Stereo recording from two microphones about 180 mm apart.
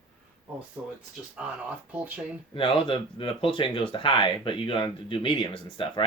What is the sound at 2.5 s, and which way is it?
Speech, 30° left (ahead or behind).